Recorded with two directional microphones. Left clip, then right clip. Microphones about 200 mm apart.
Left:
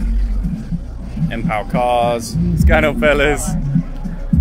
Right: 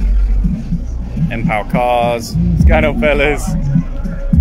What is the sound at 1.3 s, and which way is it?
Speech, 10° left (ahead or behind).